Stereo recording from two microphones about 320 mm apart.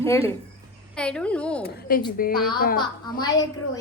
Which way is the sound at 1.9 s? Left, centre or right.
Left.